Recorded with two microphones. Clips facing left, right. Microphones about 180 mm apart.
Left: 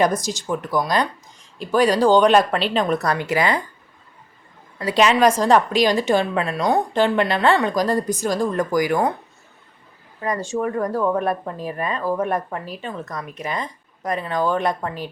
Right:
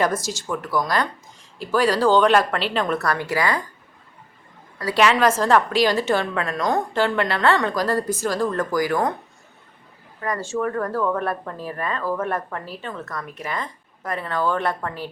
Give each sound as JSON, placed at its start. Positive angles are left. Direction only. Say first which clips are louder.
{"t": 0.0, "sound": "speech", "louder": "left 3 dB", "side_deg": 15}
{"t": 4.8, "sound": "speech", "louder": "left 2 dB", "side_deg": 20}
{"t": 10.2, "sound": "speech", "louder": "left 2 dB", "side_deg": 20}